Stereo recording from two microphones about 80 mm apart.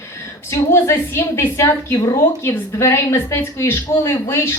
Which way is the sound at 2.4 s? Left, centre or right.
Left.